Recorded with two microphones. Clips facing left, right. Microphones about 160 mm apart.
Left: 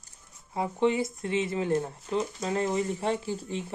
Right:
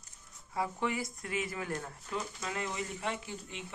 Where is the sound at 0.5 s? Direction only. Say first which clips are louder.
Left 8 dB; 25° left (ahead or behind).